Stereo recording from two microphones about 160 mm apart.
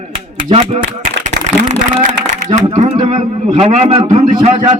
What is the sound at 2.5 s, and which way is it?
Speech, 45° right (ahead or behind).